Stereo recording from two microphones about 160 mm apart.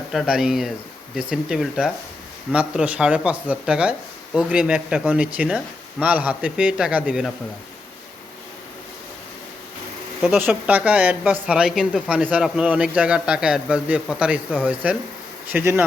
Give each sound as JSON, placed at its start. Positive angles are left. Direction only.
{"t": 0.1, "sound": "a woman's voice", "side_deg": 0}
{"t": 10.2, "sound": "a woman's voice", "side_deg": -10}